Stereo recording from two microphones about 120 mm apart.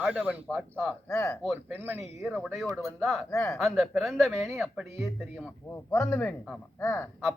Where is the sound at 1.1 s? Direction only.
25° left (ahead or behind).